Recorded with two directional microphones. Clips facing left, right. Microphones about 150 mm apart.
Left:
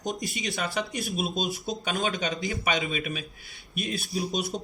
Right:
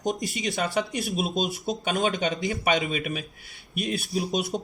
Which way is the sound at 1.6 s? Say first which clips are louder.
Right 3 dB; 50° right (ahead or behind).